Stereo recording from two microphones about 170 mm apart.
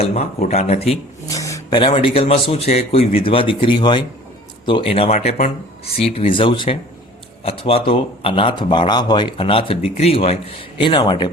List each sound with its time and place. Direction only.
0.0 s speech: 40° left (ahead or behind)
1.3 s speech: 20° left (ahead or behind)